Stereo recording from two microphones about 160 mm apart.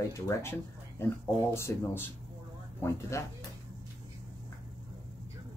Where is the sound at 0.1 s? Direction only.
15° left (ahead or behind).